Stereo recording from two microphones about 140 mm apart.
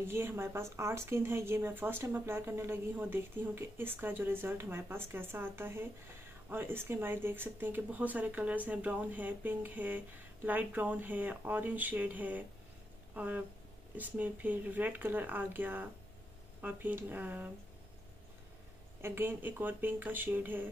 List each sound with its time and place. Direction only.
0.0 s speech: 15° right (ahead or behind)
18.9 s speech: 15° right (ahead or behind)